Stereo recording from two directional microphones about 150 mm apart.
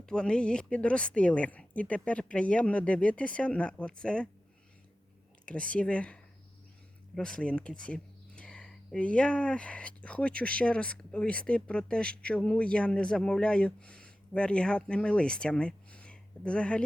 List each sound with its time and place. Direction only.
0.0 s speech: 5° left (ahead or behind)
5.5 s speech: 5° left (ahead or behind)
7.2 s speech: 5° left (ahead or behind)